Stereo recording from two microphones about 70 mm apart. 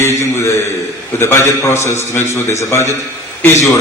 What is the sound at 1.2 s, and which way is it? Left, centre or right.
A man's voice, left.